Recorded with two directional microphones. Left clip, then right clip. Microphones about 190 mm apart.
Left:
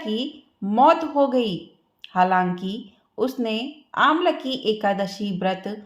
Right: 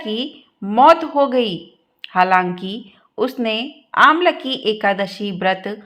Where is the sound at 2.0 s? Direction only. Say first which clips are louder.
Right 5 dB; 15° right (ahead or behind).